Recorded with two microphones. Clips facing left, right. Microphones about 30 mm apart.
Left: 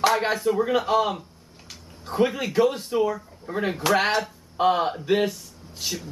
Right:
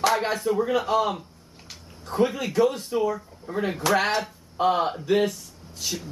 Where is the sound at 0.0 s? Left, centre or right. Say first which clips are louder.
Left 2 dB; centre.